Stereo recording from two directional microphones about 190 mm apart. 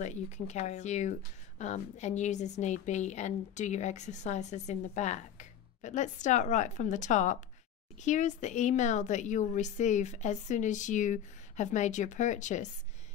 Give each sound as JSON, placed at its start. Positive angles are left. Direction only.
{"t": 0.0, "sound": "a woman's voice", "side_deg": 40}